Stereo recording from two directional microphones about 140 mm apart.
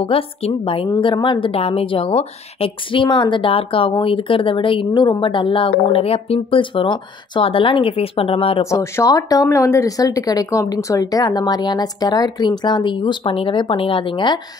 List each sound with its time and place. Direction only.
0.0 s a woman's voice: 40° left (ahead or behind)
8.6 s speech: 20° left (ahead or behind)